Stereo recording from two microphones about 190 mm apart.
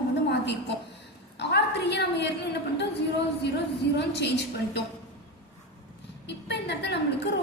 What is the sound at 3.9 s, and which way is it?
Speech, 65° left (ahead or behind).